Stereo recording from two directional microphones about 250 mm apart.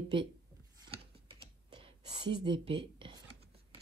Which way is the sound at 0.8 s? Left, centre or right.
Centre.